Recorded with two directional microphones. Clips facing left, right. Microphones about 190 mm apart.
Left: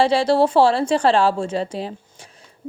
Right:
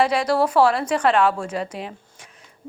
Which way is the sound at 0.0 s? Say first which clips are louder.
Left 3 dB; 30° left (ahead or behind).